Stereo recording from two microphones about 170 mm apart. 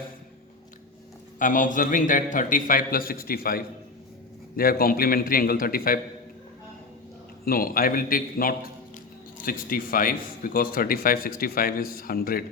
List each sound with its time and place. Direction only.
1.4 s a man's voice: 50° left (ahead or behind)
7.4 s speech: 60° left (ahead or behind)